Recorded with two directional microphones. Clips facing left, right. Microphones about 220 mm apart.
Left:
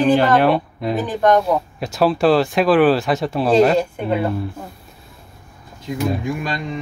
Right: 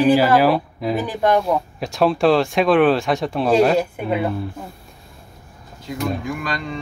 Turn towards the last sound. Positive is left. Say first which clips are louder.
# left 2 dB
turn(degrees=25)  # may be behind; listen again after turning